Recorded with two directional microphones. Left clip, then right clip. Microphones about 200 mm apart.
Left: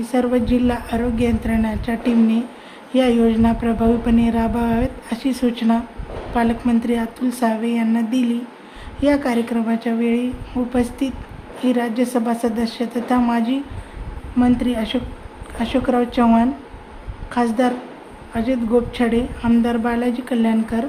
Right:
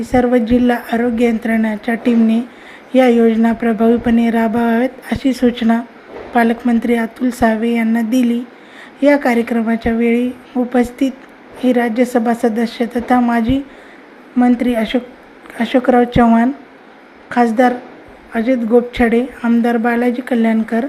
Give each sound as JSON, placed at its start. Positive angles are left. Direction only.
{"t": 0.0, "sound": "a woman's voice", "side_deg": -15}